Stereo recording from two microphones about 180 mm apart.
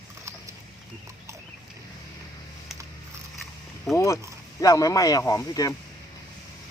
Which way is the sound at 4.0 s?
15° left (ahead or behind).